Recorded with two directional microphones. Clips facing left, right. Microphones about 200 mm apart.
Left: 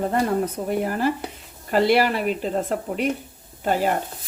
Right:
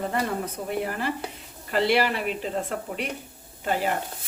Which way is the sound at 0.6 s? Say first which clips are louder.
Left 3 dB; 45° left (ahead or behind).